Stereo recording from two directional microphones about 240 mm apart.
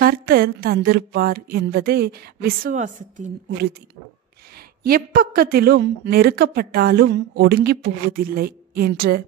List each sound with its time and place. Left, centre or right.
0.0 s a woman's voice: right
4.8 s a woman's voice: right